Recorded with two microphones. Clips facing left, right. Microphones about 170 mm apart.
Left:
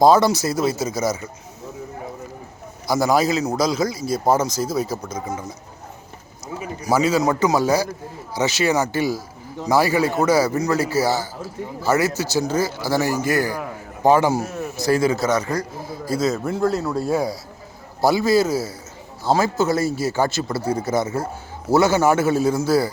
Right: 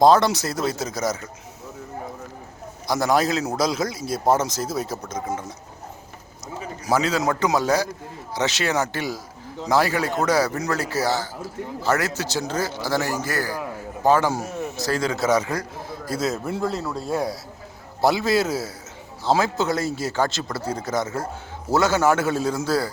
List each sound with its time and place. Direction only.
0.0 s a man's voice: 5° left (ahead or behind)
2.8 s a man's voice: 5° left (ahead or behind)
6.8 s a man's voice: 5° left (ahead or behind)
15.3 s a man's voice: 5° right (ahead or behind); by 22.9 s 10° left (ahead or behind)